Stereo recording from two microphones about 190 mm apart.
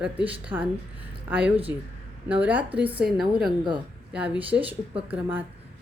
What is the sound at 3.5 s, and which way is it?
Speech, 25° right (ahead or behind).